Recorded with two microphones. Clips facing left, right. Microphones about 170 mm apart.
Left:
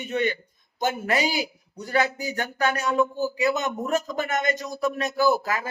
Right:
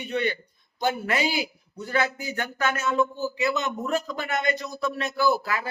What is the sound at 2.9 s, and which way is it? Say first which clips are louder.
Speech: left 2 dB; 15° left (ahead or behind).